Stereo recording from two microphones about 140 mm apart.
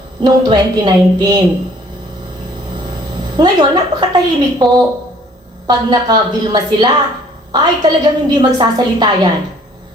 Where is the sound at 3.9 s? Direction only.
30° right (ahead or behind).